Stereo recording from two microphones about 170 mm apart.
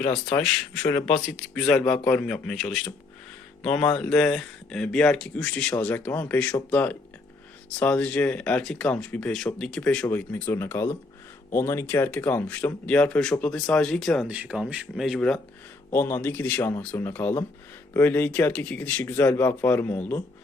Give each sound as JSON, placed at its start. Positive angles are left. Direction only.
{"t": 0.3, "sound": "speech", "side_deg": 15}
{"t": 14.3, "sound": "speech", "side_deg": -5}
{"t": 15.9, "sound": "speech", "side_deg": 15}